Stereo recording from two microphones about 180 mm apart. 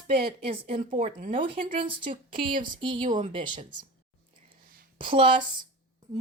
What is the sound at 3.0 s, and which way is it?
Speech, 45° right (ahead or behind).